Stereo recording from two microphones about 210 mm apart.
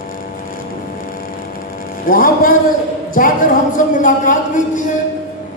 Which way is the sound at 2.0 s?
40° left (ahead or behind).